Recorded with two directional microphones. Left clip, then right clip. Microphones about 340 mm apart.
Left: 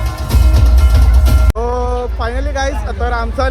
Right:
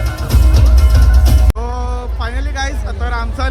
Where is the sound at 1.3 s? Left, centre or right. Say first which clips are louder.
Left 4 dB; centre.